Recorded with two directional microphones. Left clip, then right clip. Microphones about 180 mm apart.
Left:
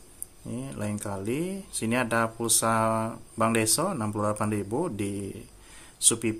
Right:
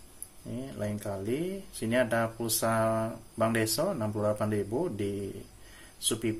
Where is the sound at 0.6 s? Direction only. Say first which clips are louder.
Left 1 dB; 30° left (ahead or behind).